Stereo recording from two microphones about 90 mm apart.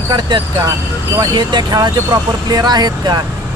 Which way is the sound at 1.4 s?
55° right (ahead or behind).